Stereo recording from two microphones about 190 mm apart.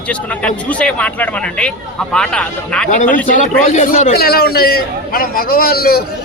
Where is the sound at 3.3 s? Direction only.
40° left (ahead or behind).